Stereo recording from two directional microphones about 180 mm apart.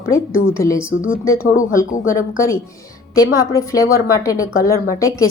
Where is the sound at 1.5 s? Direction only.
50° left (ahead or behind).